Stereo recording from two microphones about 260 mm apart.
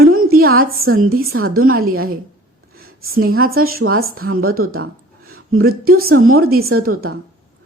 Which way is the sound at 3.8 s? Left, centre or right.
Right.